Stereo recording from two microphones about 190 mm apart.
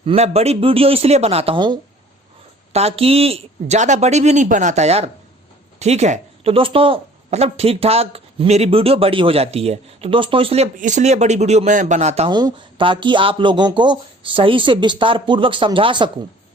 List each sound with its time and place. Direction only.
0.0 s a woman's voice: 30° right (ahead or behind)